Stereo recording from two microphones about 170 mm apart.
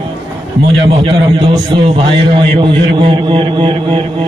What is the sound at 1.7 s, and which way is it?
A man's voice, 30° right (ahead or behind).